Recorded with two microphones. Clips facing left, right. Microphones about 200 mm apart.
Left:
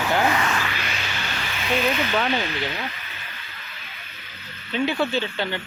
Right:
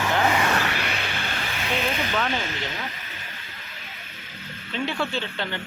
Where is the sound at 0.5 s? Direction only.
65° right (ahead or behind).